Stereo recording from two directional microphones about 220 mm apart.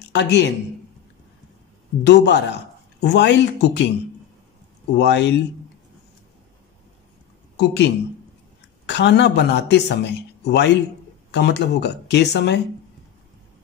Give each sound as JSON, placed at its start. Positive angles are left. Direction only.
{"t": 0.1, "sound": "a man's voice", "side_deg": 50}
{"t": 2.0, "sound": "speech", "side_deg": 50}
{"t": 4.9, "sound": "speech", "side_deg": 50}
{"t": 7.5, "sound": "a woman's voice", "side_deg": 50}